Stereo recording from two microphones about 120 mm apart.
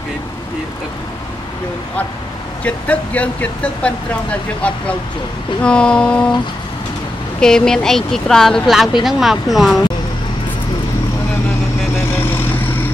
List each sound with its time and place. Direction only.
2.6 s speech: 10° left (ahead or behind)
7.3 s speech: 5° left (ahead or behind)
12.1 s vehicle: 20° left (ahead or behind)